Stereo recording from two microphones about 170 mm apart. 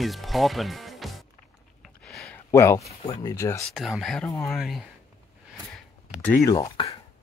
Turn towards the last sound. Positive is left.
turn(degrees=20)  # may be behind; listen again after turning